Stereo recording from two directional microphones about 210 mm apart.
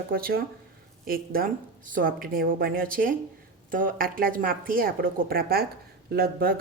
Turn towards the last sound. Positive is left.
turn(degrees=-45)  # may be behind; listen again after turning